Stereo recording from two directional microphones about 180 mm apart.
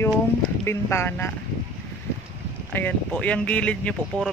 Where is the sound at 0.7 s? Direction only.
15° left (ahead or behind).